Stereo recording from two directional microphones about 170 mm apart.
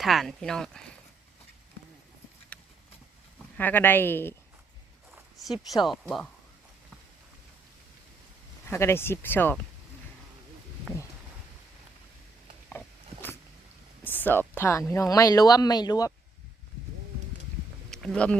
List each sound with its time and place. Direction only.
0.0 s speech: centre (ahead or behind)
2.5 s a sound: 5° left (ahead or behind)
3.3 s speech: 10° left (ahead or behind)
5.8 s speech: centre (ahead or behind)
8.6 s speech: 15° left (ahead or behind)
14.0 s speech: 10° left (ahead or behind)
17.9 s speech: 5° left (ahead or behind)